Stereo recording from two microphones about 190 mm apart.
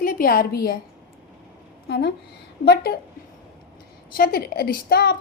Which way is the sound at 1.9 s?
60° left (ahead or behind).